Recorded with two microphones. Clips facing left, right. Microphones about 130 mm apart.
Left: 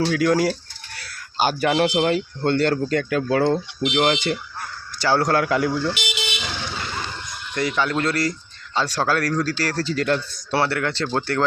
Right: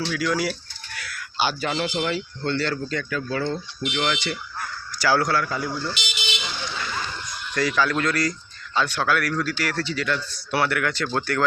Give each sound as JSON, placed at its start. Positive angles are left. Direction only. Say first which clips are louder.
{"t": 0.0, "sound": "speech", "louder": "left 6 dB", "side_deg": 55}
{"t": 0.9, "sound": "a sound", "louder": "left 2 dB", "side_deg": 35}
{"t": 1.5, "sound": "speech", "louder": "left 8 dB", "side_deg": 60}
{"t": 3.8, "sound": "speech", "louder": "left 6 dB", "side_deg": 30}
{"t": 4.0, "sound": "speech", "louder": "left 5 dB", "side_deg": 50}
{"t": 4.9, "sound": "speech", "louder": "left 1 dB", "side_deg": 25}
{"t": 5.3, "sound": "speech", "louder": "left 5 dB", "side_deg": 70}
{"t": 7.5, "sound": "speech", "louder": "even", "side_deg": 25}
{"t": 10.5, "sound": "speech", "louder": "left 2 dB", "side_deg": 30}